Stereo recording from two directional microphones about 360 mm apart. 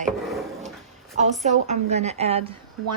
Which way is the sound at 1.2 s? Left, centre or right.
Centre.